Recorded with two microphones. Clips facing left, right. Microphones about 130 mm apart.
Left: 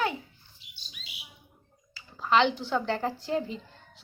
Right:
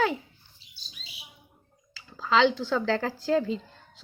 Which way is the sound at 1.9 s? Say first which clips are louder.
Even; 90° right.